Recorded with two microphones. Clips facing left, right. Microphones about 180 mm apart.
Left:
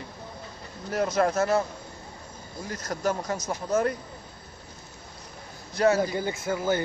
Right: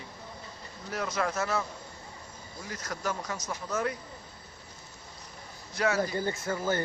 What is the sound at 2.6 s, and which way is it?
Speech, 40° left (ahead or behind).